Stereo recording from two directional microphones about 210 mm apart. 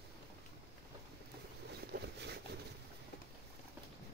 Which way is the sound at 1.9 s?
50° right (ahead or behind).